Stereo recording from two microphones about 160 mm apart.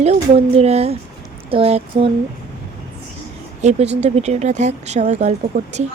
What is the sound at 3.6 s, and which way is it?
Speech, 40° right (ahead or behind).